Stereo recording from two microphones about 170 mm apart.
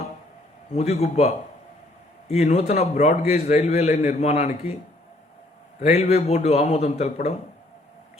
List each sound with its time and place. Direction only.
0.7 s a man's voice: 40° left (ahead or behind)
2.3 s a man's voice: 40° left (ahead or behind)
5.8 s a man's voice: 40° left (ahead or behind)